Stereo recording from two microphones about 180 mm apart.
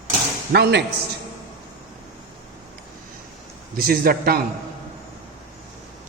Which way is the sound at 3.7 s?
55° right (ahead or behind).